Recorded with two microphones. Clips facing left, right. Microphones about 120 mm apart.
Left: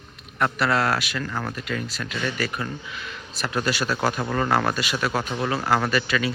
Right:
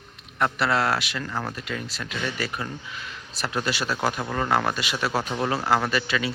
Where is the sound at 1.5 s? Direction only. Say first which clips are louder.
Left 3 dB; 25° right (ahead or behind).